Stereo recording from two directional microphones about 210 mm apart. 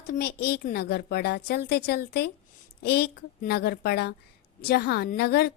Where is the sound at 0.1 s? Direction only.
50° left (ahead or behind).